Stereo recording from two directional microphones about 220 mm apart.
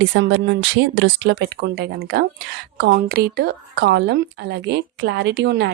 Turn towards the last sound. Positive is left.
turn(degrees=-50)  # may be behind; listen again after turning